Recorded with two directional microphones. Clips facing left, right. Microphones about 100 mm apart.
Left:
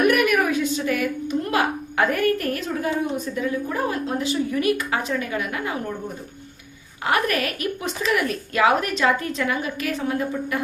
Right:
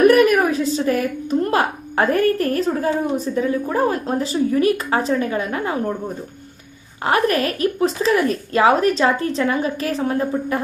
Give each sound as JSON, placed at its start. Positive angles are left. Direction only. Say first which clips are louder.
{"t": 0.0, "sound": "speech", "louder": "right 6 dB", "side_deg": -35}
{"t": 7.0, "sound": "speech", "louder": "right 4 dB", "side_deg": -35}